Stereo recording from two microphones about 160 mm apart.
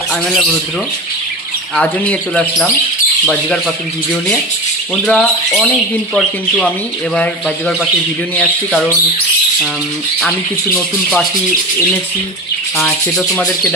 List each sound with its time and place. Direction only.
1.8 s speech: 5° left (ahead or behind)
12.8 s speech: 20° left (ahead or behind)